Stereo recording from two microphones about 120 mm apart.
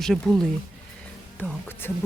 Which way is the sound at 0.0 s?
Centre (ahead or behind).